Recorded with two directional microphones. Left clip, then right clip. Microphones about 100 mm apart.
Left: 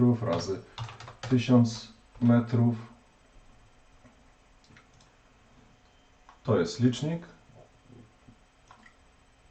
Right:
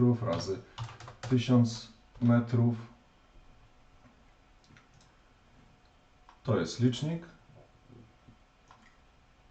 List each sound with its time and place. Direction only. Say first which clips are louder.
0.0 s speech: left 3 dB; 5° left (ahead or behind)
0.8 s computer keyboard: left 3 dB; 25° left (ahead or behind)
1.3 s speech: left 4 dB; 5° left (ahead or behind)
6.4 s speech: left 4 dB; centre (ahead or behind)